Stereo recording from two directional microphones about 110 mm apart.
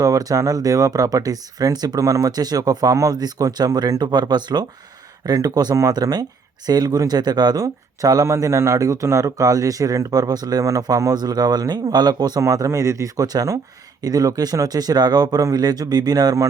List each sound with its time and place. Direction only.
0.0 s speech: 30° right (ahead or behind)